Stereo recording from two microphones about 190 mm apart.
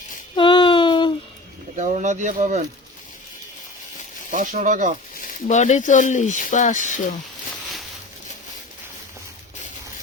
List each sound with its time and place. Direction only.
0.3 s a sound: 25° left (ahead or behind)
1.7 s speech: 40° right (ahead or behind)
4.3 s speech: 40° right (ahead or behind)
5.2 s speech: 40° left (ahead or behind)